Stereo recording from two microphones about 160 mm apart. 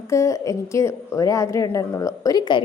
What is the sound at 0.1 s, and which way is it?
Speech, 20° left (ahead or behind).